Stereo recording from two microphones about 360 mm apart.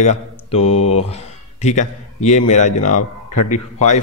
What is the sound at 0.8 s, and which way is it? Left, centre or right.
Speech, centre.